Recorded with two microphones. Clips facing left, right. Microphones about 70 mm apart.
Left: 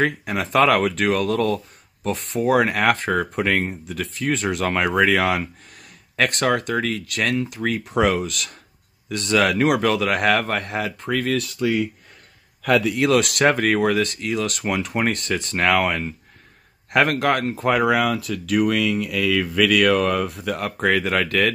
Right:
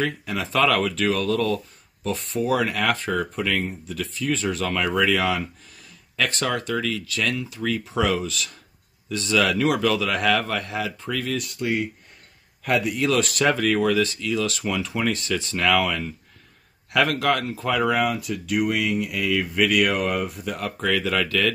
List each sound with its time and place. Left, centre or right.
0.3 s speech: left
12.7 s speech: left
17.6 s speech: left
20.5 s speech: left